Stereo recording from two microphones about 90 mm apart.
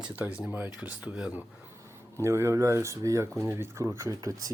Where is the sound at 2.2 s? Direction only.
30° right (ahead or behind).